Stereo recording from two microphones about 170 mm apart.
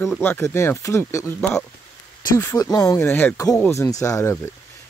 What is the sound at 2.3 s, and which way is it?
Speech, 20° left (ahead or behind).